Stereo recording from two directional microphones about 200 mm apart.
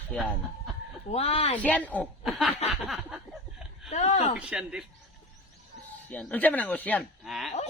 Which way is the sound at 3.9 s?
35° left (ahead or behind).